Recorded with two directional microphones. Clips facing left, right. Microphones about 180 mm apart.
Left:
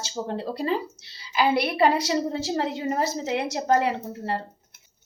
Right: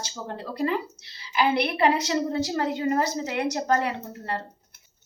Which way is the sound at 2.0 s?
25° left (ahead or behind).